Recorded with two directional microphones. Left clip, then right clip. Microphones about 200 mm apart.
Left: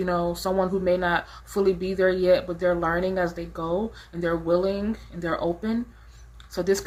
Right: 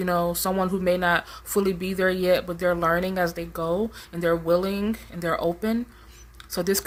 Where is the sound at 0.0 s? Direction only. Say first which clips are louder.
Right 1 dB; 50° right (ahead or behind).